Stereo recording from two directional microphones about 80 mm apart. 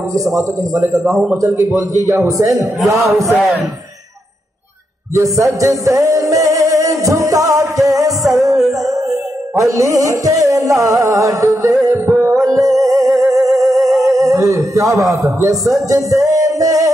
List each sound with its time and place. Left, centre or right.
0.1 s a man's voice: right
5.1 s a man's voice: right
5.6 s music: right
13.7 s music: centre
13.9 s music: right